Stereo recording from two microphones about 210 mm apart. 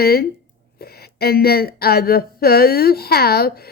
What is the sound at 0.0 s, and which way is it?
Speech, 45° left (ahead or behind).